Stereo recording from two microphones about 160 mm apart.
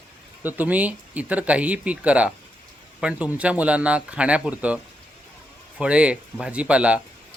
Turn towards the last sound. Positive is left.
turn(degrees=-10)  # may be behind; listen again after turning